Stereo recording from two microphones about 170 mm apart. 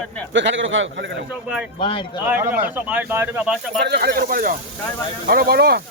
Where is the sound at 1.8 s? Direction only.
30° left (ahead or behind).